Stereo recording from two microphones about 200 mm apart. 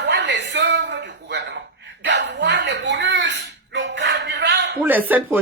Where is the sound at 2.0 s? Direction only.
60° right (ahead or behind).